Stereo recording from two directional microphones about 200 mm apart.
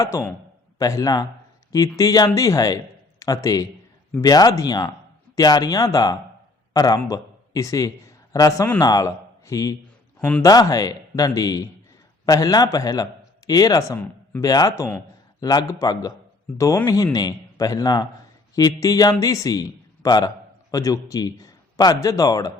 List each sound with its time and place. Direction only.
0.0 s a man's voice: 15° left (ahead or behind)
10.2 s a man's voice: 5° left (ahead or behind)
10.4 s a man's voice: 20° left (ahead or behind)